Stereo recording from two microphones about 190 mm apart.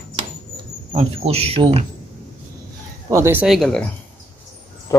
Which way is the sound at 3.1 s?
10° right (ahead or behind).